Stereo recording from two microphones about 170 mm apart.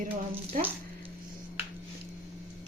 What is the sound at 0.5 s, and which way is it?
Speech, 50° right (ahead or behind).